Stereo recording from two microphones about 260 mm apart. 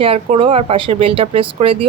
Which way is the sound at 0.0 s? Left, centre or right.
Right.